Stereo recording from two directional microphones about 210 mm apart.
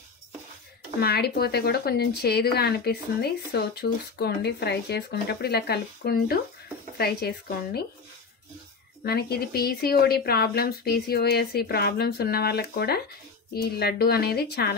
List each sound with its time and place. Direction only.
0.9 s speech: 50° left (ahead or behind)
9.0 s speech: 50° left (ahead or behind)